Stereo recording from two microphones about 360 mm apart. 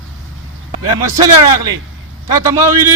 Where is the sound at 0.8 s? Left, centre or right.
Centre.